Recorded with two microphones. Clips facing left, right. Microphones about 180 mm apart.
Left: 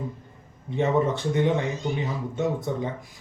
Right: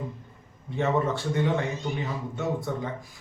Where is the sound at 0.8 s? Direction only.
20° left (ahead or behind).